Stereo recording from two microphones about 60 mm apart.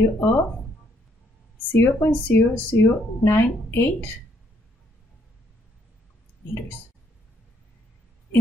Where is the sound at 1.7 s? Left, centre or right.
Left.